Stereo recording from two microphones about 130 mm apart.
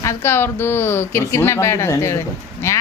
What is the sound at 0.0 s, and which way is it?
Speech, 20° left (ahead or behind).